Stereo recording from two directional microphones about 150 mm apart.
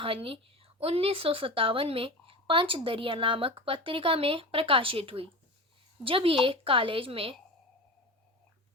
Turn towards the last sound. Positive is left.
turn(degrees=-35)  # may be behind; listen again after turning